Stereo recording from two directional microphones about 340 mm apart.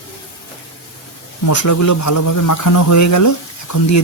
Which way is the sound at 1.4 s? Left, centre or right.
Left.